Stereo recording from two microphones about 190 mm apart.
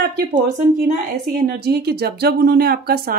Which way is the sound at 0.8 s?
45° right (ahead or behind).